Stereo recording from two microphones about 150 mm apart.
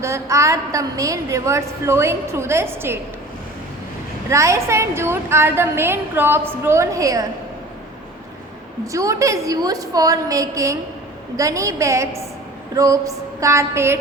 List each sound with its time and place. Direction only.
0.0 s a woman's voice: 20° right (ahead or behind)
4.3 s a woman's voice: 20° right (ahead or behind)
8.9 s a woman's voice: 20° right (ahead or behind)